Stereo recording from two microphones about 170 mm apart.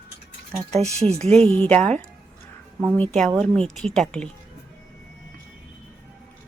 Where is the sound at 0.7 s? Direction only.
40° right (ahead or behind).